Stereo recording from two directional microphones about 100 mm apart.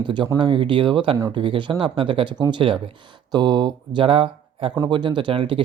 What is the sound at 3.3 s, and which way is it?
Speech, 45° right (ahead or behind).